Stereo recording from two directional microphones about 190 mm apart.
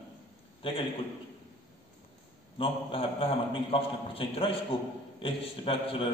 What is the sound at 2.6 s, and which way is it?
A man's voice, 30° left (ahead or behind).